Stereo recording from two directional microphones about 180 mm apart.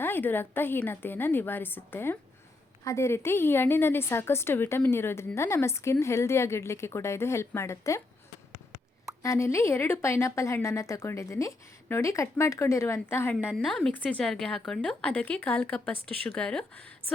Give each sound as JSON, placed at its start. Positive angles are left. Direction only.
{"t": 0.0, "sound": "a woman's voice", "side_deg": 10}
{"t": 9.2, "sound": "a woman's voice", "side_deg": 15}